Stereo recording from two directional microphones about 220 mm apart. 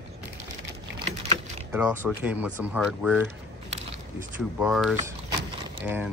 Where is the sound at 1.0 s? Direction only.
25° right (ahead or behind).